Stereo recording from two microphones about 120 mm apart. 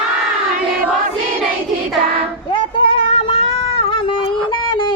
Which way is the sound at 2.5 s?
45° left (ahead or behind).